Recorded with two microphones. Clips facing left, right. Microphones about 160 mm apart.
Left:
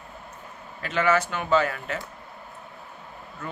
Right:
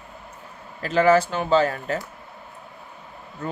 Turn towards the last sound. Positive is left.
turn(degrees=-35)  # may be behind; listen again after turning